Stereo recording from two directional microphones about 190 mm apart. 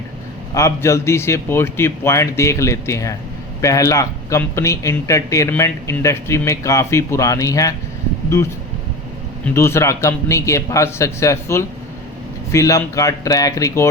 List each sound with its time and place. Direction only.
0.5 s speech: 15° left (ahead or behind)
9.4 s speech: 15° left (ahead or behind)